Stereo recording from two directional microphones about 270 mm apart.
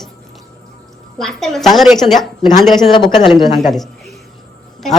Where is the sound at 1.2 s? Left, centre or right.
Centre.